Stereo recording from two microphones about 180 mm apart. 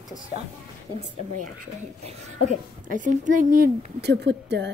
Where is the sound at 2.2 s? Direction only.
45° right (ahead or behind).